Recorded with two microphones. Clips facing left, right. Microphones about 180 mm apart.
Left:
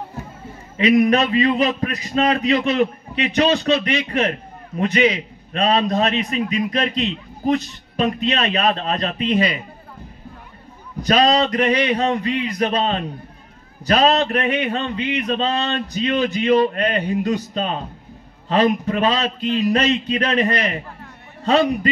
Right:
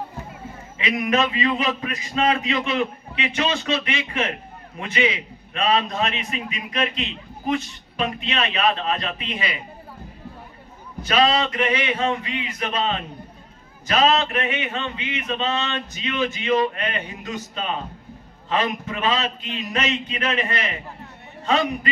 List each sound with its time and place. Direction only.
0.7 s a man's voice: 35° left (ahead or behind)
11.0 s a man's voice: 40° left (ahead or behind)